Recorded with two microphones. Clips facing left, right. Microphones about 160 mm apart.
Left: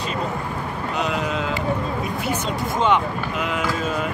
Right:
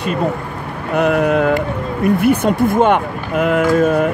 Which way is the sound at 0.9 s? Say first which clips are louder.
Right 12 dB; 60° right (ahead or behind).